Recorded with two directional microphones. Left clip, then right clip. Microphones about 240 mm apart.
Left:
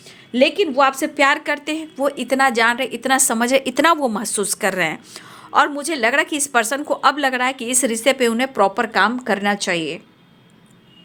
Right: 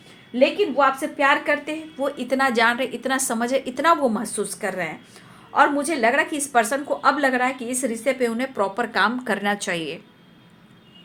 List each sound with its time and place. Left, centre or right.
0.3 s a woman's voice: left